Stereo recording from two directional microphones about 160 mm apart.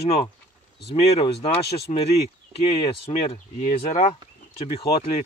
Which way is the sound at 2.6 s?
35° left (ahead or behind).